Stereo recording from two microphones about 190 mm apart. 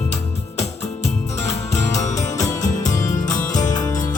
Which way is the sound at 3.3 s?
20° left (ahead or behind).